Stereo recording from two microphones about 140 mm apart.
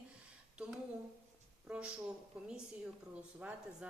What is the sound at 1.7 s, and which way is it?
Speech, 5° right (ahead or behind).